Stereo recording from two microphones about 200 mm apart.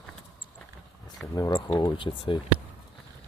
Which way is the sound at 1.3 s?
20° left (ahead or behind).